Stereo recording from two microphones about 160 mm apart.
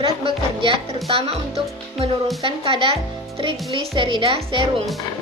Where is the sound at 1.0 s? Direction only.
35° right (ahead or behind).